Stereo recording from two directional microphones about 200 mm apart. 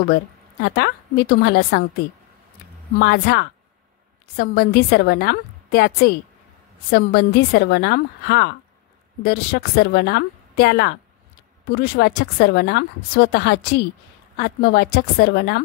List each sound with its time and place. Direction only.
0.1 s a woman's voice: 55° left (ahead or behind)
3.0 s a woman's voice: 55° left (ahead or behind)